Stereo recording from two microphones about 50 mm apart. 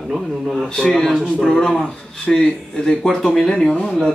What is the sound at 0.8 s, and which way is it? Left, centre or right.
Speech, centre.